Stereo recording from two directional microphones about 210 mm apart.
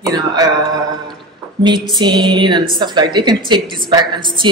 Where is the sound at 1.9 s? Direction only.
20° right (ahead or behind).